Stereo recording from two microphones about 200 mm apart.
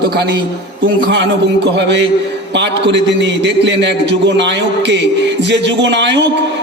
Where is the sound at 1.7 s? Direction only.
60° right (ahead or behind).